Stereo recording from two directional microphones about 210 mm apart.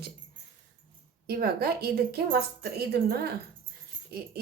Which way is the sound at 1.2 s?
45° right (ahead or behind).